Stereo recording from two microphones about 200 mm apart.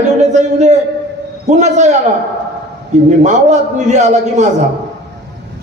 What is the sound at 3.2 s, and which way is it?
Speech, 35° right (ahead or behind).